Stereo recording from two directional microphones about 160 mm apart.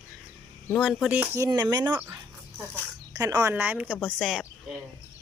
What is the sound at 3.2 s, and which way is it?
A woman's voice, 20° right (ahead or behind).